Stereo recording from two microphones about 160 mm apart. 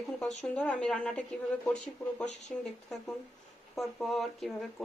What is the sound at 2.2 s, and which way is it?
Speech, 45° left (ahead or behind).